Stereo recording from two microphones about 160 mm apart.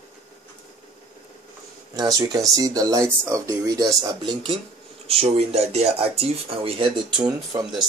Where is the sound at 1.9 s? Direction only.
25° right (ahead or behind).